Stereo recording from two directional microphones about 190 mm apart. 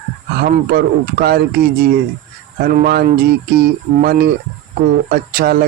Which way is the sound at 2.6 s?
50° right (ahead or behind).